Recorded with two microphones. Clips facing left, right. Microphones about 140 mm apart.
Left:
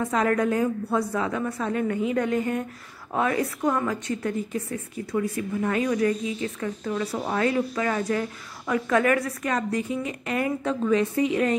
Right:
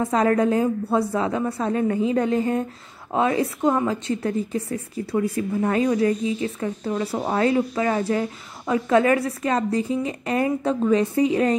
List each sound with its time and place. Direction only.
0.0 s a woman's voice: 30° right (ahead or behind)